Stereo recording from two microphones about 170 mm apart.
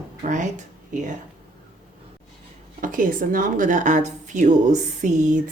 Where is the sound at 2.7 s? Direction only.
55° right (ahead or behind).